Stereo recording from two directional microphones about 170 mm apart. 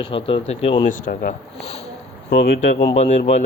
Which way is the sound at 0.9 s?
50° left (ahead or behind).